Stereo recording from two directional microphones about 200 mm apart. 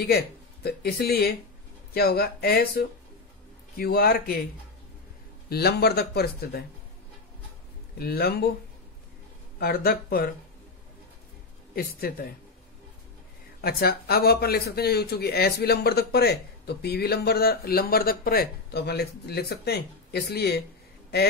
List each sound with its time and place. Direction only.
0.7 s speech: 50° left (ahead or behind)
5.5 s speech: 50° left (ahead or behind)
8.0 s speech: 50° left (ahead or behind)
9.6 s speech: 50° left (ahead or behind)
11.7 s speech: 50° left (ahead or behind)
13.6 s speech: 50° left (ahead or behind)